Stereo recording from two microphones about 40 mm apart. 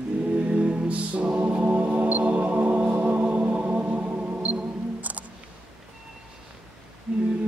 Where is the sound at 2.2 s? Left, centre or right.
Right.